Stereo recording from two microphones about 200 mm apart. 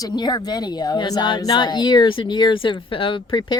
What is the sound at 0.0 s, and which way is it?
Speech, 20° left (ahead or behind).